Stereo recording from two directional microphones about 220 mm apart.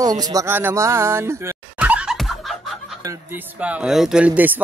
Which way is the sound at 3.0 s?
10° right (ahead or behind).